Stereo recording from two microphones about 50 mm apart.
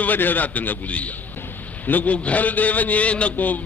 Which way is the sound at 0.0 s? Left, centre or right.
Left.